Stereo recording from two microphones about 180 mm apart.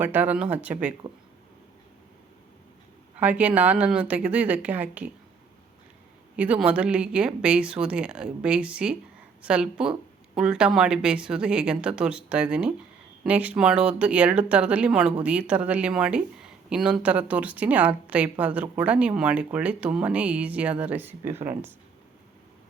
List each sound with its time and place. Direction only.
0.0 s speech: 10° right (ahead or behind)
3.2 s speech: 10° right (ahead or behind)
6.3 s a woman's voice: 5° right (ahead or behind)